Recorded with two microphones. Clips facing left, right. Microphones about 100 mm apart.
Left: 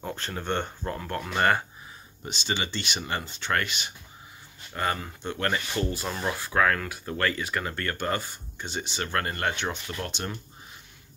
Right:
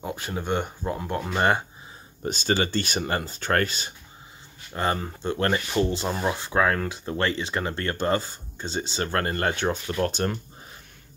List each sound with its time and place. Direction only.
0.0 s speech: 10° right (ahead or behind)
2.2 s speech: 45° right (ahead or behind)